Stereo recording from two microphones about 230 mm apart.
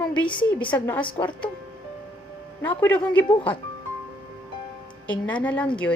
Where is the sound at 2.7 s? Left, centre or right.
Centre.